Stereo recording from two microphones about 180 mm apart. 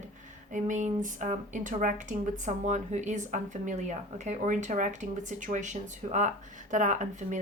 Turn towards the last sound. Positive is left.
turn(degrees=-45)  # may be behind; listen again after turning